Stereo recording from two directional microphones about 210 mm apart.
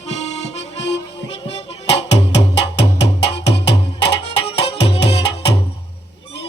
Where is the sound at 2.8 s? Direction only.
55° left (ahead or behind).